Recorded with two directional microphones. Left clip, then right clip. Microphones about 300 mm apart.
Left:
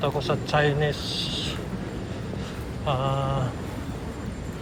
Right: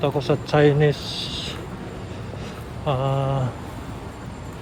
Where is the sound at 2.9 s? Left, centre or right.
Centre.